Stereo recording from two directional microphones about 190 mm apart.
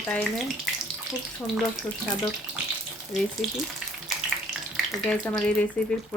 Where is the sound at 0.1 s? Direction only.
5° left (ahead or behind).